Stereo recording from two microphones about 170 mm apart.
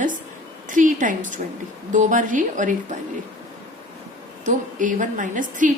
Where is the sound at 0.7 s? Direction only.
50° right (ahead or behind).